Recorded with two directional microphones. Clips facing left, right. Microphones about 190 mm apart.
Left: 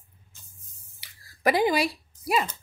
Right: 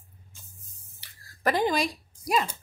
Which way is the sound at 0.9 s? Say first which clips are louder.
Left 2 dB; 10° left (ahead or behind).